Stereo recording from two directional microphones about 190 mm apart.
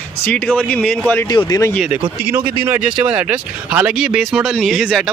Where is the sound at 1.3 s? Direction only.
20° left (ahead or behind).